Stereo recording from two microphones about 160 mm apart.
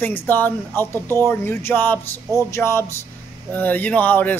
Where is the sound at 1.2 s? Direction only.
15° left (ahead or behind).